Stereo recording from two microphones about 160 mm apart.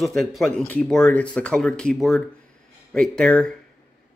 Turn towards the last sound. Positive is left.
turn(degrees=5)  # may be behind; listen again after turning